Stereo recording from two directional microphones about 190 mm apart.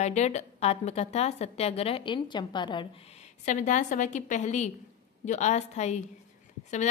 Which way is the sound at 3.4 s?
40° left (ahead or behind).